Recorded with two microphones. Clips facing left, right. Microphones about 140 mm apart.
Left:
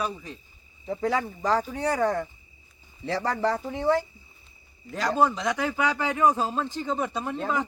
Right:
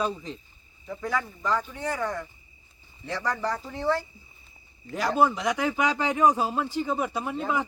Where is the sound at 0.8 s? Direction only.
30° left (ahead or behind); by 4.1 s 15° left (ahead or behind).